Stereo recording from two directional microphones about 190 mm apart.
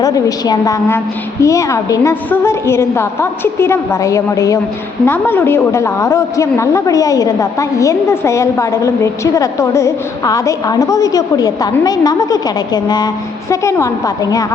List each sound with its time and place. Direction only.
0.0 s a woman's voice: 20° left (ahead or behind)